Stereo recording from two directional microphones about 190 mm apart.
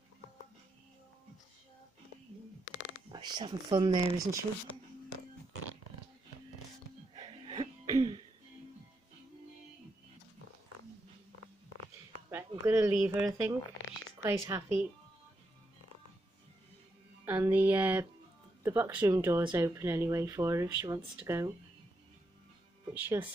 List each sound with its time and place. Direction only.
3.1 s speech: 25° right (ahead or behind)
7.2 s cough: 25° right (ahead or behind)
12.3 s speech: 10° right (ahead or behind)
17.2 s a woman's voice: 15° right (ahead or behind)
22.9 s speech: 10° right (ahead or behind)